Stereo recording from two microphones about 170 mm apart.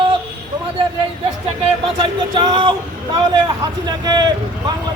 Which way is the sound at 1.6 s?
30° right (ahead or behind).